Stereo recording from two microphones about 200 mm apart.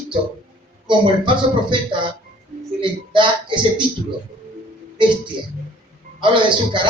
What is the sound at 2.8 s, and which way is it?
Speech, 25° right (ahead or behind).